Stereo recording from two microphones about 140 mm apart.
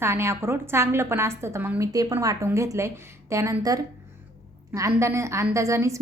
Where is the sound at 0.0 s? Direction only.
20° right (ahead or behind).